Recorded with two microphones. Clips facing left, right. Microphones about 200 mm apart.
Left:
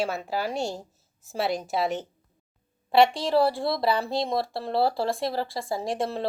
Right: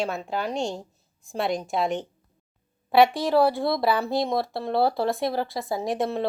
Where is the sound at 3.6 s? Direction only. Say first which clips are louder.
Right 2 dB; 55° right (ahead or behind).